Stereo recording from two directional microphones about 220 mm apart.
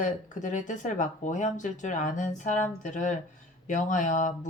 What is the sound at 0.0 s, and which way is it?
Speech, 35° left (ahead or behind).